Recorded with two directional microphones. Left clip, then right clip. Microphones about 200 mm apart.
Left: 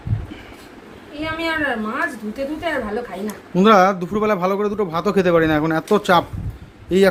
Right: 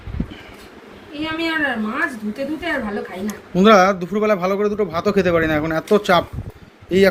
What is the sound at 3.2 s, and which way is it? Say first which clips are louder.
Speech: right 1 dB; 15° left (ahead or behind).